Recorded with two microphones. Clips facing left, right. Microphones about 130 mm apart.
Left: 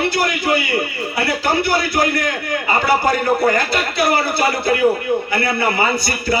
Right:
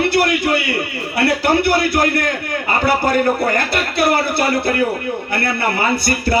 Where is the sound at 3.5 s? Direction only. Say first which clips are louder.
Even; 55° right (ahead or behind).